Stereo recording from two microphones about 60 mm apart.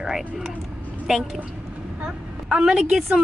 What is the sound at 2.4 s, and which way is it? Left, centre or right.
Speech, centre.